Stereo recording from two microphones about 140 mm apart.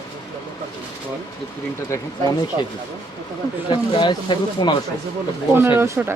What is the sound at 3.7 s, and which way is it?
Speech, 35° left (ahead or behind).